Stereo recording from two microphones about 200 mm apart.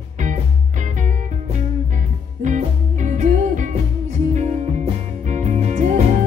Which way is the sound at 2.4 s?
40° right (ahead or behind).